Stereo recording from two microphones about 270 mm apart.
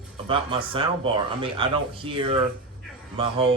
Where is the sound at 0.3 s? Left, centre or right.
Centre.